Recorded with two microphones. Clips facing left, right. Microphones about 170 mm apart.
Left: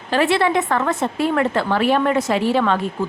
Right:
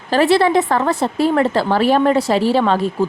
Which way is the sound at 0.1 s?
35° right (ahead or behind).